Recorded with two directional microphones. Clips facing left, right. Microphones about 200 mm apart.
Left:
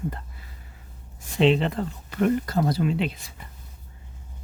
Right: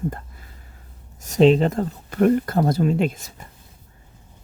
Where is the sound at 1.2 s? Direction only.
40° right (ahead or behind).